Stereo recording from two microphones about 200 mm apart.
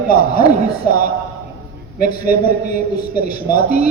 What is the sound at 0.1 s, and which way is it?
A man's voice, 45° left (ahead or behind).